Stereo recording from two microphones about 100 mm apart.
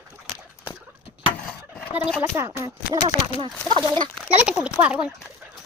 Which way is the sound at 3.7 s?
50° right (ahead or behind).